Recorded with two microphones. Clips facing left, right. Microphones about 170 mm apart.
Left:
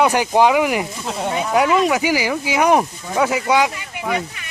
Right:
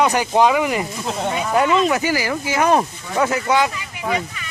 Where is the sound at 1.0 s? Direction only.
Centre (ahead or behind).